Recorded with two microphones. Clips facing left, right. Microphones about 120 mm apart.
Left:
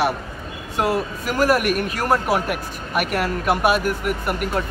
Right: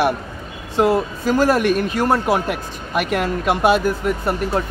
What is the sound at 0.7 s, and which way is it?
Speech, 25° right (ahead or behind).